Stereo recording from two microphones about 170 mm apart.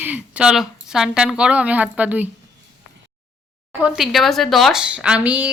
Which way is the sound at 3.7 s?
5° right (ahead or behind).